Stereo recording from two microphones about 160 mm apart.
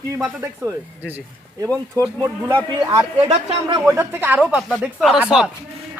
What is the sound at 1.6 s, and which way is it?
Speech, 20° right (ahead or behind).